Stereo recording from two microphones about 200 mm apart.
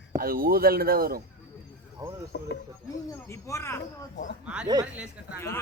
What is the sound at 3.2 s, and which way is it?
Speech, 15° left (ahead or behind).